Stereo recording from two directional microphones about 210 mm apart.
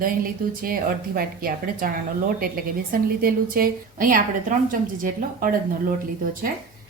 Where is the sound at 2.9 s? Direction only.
45° right (ahead or behind).